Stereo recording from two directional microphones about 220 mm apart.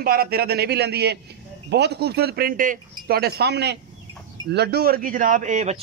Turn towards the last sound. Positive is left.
turn(degrees=-30)  # may be behind; listen again after turning